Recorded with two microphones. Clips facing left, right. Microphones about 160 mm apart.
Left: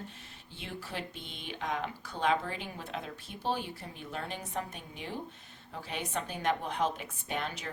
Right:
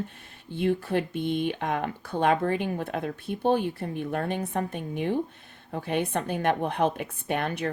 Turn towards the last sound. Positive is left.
turn(degrees=-60)  # may be behind; listen again after turning